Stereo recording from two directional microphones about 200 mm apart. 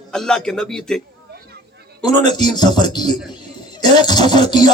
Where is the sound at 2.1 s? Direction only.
20° left (ahead or behind).